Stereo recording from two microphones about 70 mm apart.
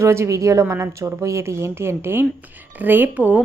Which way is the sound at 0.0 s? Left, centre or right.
Right.